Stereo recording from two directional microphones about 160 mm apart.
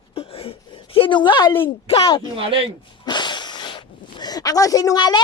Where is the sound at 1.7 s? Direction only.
35° left (ahead or behind).